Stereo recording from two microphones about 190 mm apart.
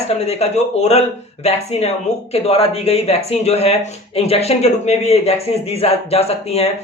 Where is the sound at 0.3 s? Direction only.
35° left (ahead or behind).